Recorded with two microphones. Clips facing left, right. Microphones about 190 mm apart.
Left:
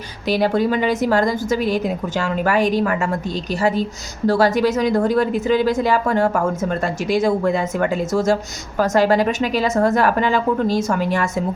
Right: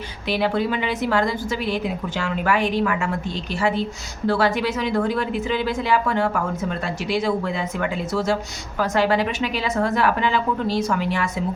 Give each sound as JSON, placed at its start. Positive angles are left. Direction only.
{"t": 0.3, "sound": "a woman's voice", "side_deg": 40}